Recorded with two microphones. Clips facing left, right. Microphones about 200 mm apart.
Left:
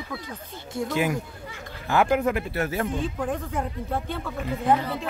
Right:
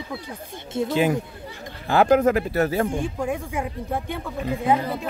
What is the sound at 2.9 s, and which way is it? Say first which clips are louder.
Speech: right 2 dB; 10° right (ahead or behind).